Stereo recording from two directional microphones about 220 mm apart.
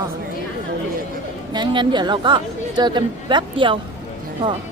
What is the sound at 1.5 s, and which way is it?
Speech, 20° right (ahead or behind).